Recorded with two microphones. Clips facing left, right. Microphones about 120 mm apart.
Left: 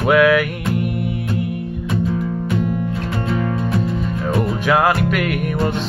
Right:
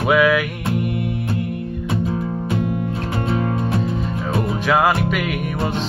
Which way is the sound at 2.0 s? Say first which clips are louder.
Left 1 dB; 35° right (ahead or behind).